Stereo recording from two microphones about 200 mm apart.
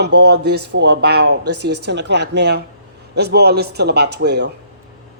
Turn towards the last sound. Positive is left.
turn(degrees=-55)  # may be behind; listen again after turning